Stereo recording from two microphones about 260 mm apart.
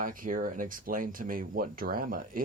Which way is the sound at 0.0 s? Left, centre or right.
Right.